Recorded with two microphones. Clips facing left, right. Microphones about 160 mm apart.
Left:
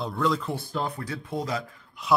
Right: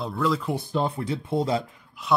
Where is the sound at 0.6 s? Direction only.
25° right (ahead or behind).